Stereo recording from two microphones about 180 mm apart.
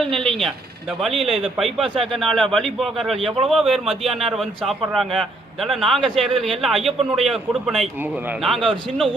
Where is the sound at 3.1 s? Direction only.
30° right (ahead or behind).